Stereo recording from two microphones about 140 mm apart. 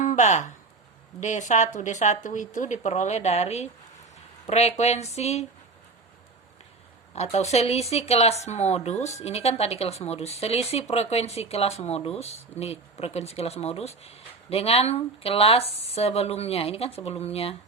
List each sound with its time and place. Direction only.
0.0 s speech: 60° left (ahead or behind)
7.1 s speech: 50° left (ahead or behind)